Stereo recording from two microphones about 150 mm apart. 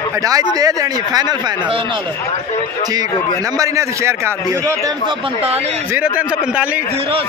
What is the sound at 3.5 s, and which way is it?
Speech, 20° right (ahead or behind).